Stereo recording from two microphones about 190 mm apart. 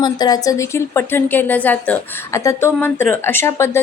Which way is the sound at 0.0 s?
20° left (ahead or behind).